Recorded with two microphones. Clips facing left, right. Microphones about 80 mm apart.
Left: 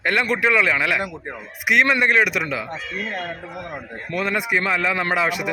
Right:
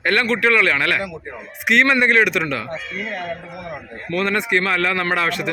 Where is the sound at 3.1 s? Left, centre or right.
Left.